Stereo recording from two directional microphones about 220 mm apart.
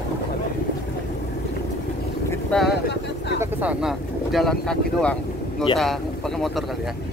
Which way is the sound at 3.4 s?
10° right (ahead or behind).